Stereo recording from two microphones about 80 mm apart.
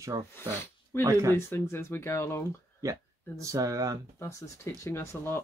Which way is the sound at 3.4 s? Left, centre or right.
Right.